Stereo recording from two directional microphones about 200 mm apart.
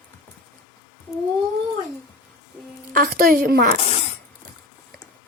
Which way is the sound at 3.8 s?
30° left (ahead or behind).